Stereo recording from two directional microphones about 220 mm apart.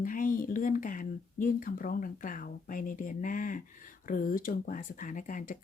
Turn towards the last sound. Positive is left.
turn(degrees=35)  # may be behind; listen again after turning